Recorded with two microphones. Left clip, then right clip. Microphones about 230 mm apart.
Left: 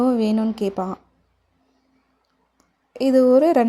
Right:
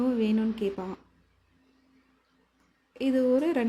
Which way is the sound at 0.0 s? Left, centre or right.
Left.